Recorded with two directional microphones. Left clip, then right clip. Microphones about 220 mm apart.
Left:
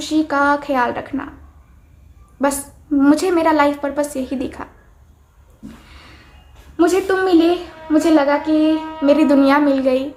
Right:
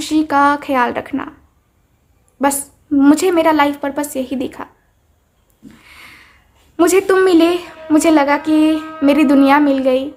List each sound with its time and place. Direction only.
0.0 s a woman's voice: 30° right (ahead or behind)
2.4 s a woman's voice: 30° right (ahead or behind)
5.8 s a sound: 30° right (ahead or behind)
6.7 s a woman's voice: 35° right (ahead or behind)